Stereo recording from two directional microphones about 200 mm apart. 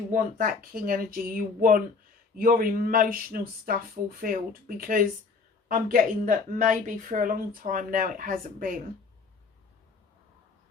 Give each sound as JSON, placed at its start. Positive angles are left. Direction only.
{"t": 0.1, "sound": "speech", "side_deg": -45}